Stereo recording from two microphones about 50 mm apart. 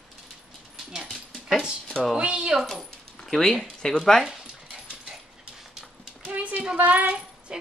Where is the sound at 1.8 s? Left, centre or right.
Centre.